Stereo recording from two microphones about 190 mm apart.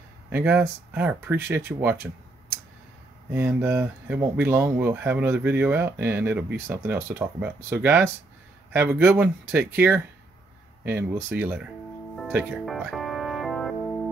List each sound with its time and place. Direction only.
0.3 s speech: 10° right (ahead or behind)
12.3 s music: 5° right (ahead or behind)